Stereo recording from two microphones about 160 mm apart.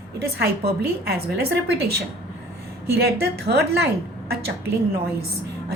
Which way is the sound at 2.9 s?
85° right.